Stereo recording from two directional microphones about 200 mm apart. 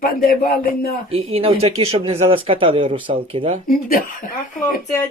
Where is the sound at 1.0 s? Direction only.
30° right (ahead or behind).